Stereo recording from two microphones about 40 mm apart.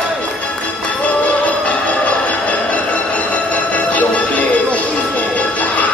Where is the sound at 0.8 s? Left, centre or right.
Left.